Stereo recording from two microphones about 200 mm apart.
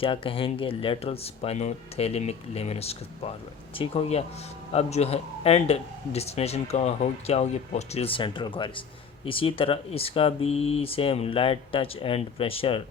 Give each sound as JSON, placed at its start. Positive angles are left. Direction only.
{"t": 0.0, "sound": "speech", "side_deg": 25}